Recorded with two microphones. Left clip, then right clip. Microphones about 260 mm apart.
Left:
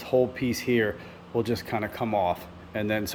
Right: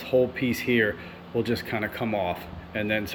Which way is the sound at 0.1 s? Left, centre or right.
Centre.